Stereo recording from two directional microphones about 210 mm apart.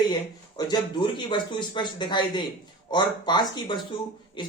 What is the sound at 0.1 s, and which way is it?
A man's voice, 20° left (ahead or behind).